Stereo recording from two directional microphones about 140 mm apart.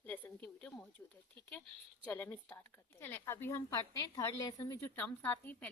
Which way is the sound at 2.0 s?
10° left (ahead or behind).